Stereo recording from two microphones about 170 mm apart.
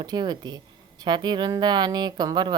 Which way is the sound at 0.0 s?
25° right (ahead or behind).